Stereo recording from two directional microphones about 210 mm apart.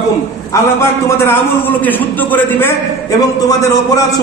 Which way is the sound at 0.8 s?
10° left (ahead or behind).